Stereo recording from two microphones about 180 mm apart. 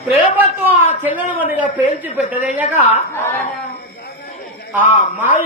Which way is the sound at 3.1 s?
15° left (ahead or behind).